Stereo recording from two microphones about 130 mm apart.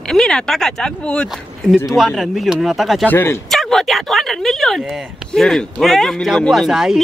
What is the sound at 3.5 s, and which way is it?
Speech, centre (ahead or behind).